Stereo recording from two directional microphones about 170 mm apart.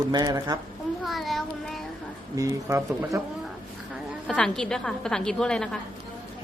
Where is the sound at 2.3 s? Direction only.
20° right (ahead or behind).